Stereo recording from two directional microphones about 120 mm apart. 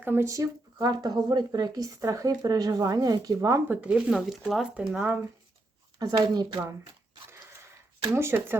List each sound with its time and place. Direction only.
0.0 s speech: 20° right (ahead or behind)
3.7 s speech: 10° right (ahead or behind)
6.0 s speech: 35° right (ahead or behind)
8.0 s speech: 20° right (ahead or behind)